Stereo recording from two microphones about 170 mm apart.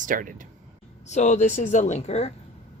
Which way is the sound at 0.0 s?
50° right (ahead or behind).